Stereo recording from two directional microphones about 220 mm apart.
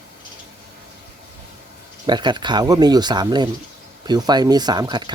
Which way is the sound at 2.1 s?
20° right (ahead or behind).